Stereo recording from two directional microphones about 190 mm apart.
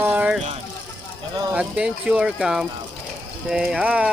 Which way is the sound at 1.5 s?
5° right (ahead or behind).